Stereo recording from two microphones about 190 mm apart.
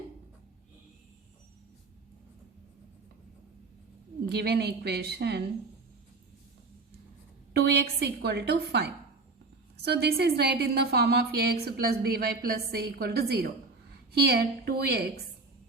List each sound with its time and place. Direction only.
4.3 s a woman's voice: 60° right (ahead or behind)
7.5 s a woman's voice: 60° right (ahead or behind)